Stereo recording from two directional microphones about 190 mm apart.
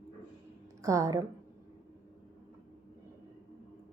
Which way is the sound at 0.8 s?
15° right (ahead or behind).